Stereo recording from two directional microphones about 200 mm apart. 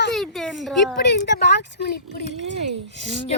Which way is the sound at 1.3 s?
60° left (ahead or behind).